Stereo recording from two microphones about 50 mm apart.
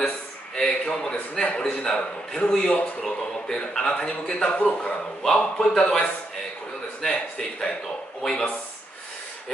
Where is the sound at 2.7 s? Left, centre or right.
Left.